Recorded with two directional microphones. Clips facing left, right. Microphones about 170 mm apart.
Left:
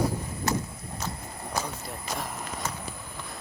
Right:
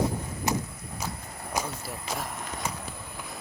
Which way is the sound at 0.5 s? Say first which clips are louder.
Even; 15° right (ahead or behind).